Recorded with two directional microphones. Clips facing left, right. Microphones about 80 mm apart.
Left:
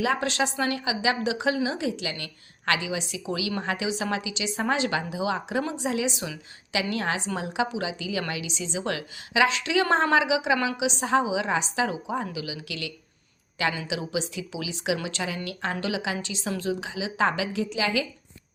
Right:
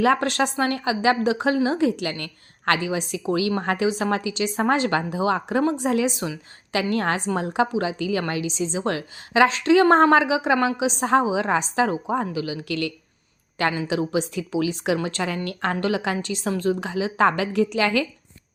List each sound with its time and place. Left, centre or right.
0.0 s a woman's voice: right